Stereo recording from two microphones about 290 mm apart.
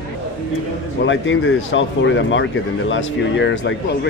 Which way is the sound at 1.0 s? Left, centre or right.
Left.